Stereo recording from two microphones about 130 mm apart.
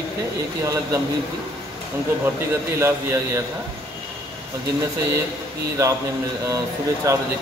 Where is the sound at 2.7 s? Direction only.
20° right (ahead or behind).